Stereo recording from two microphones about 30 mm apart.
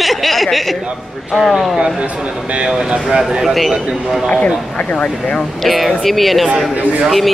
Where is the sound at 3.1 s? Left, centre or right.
Right.